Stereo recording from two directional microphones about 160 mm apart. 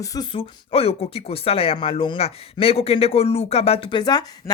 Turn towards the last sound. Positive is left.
turn(degrees=25)  # may be behind; listen again after turning